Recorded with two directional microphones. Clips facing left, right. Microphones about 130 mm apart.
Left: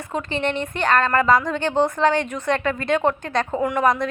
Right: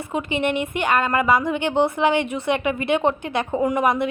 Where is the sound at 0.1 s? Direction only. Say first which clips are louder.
Right 1 dB; 15° right (ahead or behind).